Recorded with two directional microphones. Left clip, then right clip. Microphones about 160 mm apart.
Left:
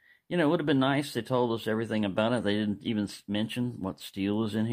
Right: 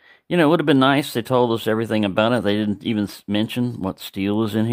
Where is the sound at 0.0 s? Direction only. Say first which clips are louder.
Right 10 dB; 40° right (ahead or behind).